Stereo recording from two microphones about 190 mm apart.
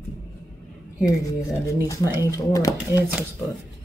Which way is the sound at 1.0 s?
15° left (ahead or behind).